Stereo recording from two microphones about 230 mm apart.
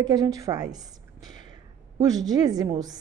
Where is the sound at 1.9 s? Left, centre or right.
Centre.